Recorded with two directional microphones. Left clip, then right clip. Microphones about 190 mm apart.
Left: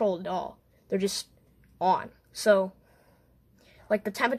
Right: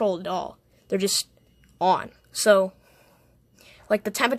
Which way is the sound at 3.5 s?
20° right (ahead or behind).